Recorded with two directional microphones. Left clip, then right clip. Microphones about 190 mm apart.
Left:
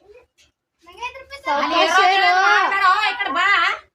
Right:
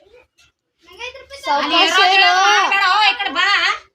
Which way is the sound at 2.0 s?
40° right (ahead or behind).